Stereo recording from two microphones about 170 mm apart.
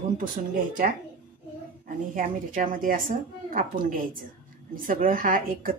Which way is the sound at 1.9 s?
55° right (ahead or behind).